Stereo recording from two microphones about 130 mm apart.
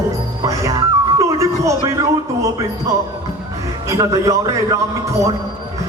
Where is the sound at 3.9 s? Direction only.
25° right (ahead or behind).